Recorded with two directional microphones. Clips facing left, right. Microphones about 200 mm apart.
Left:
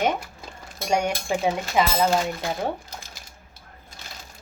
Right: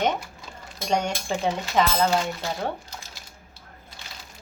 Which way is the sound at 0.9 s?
10° left (ahead or behind).